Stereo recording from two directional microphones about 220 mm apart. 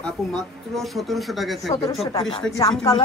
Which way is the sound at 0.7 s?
Centre (ahead or behind).